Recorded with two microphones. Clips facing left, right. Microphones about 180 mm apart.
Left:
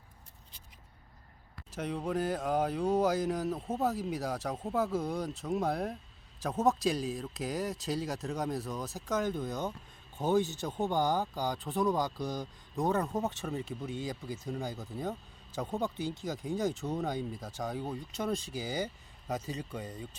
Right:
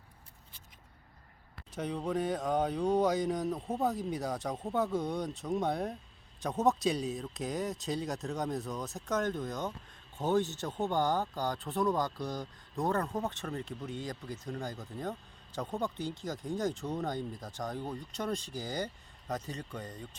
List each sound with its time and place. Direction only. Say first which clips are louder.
1.7 s speech: even; centre (ahead or behind)
10.3 s speech: left 1 dB; 15° left (ahead or behind)